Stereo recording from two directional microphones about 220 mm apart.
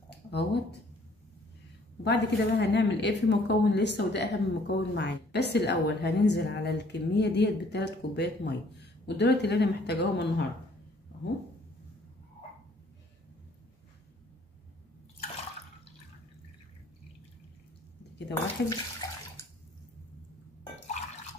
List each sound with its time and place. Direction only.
0.3 s a woman's voice: 50° left (ahead or behind)
2.0 s a woman's voice: 50° left (ahead or behind)
18.3 s bathtub: 15° left (ahead or behind)